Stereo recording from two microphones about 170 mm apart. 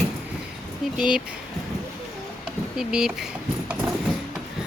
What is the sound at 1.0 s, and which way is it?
Speech, 5° right (ahead or behind).